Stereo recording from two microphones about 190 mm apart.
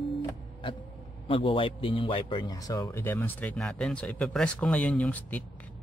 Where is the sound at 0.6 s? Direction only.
25° left (ahead or behind).